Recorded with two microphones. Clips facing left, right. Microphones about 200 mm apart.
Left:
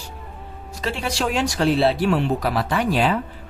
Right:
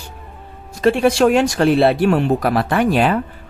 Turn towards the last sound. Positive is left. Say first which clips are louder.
# right 5 dB
turn(degrees=-55)  # may be behind; listen again after turning